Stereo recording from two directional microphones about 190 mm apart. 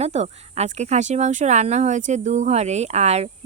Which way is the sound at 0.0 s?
35° right (ahead or behind).